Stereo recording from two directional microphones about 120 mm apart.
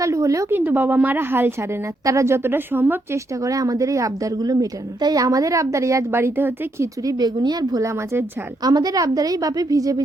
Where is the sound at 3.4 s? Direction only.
30° right (ahead or behind).